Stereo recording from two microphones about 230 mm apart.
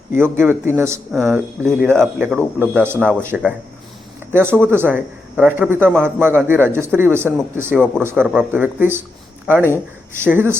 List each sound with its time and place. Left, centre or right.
0.2 s a man's voice: centre
10.2 s a man's voice: centre